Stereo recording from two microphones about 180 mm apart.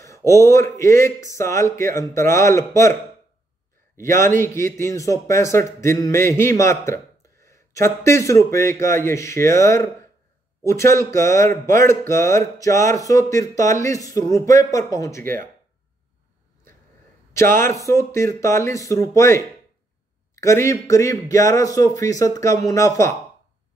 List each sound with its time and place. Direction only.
0.0 s a man's voice: 15° left (ahead or behind)
4.0 s a man's voice: 15° left (ahead or behind)
11.6 s speech: 50° right (ahead or behind)
11.9 s a man's voice: 15° left (ahead or behind)
17.8 s a man's voice: 15° left (ahead or behind)